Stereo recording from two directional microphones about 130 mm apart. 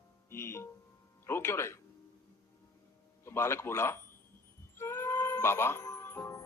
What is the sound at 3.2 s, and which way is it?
Speech, 20° left (ahead or behind).